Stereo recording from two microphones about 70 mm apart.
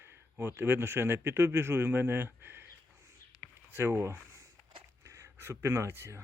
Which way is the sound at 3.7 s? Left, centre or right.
Right.